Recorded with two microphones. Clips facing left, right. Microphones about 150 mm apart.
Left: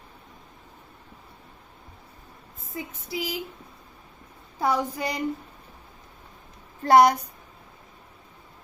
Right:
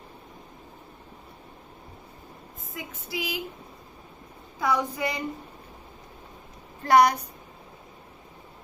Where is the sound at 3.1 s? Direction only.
35° left (ahead or behind).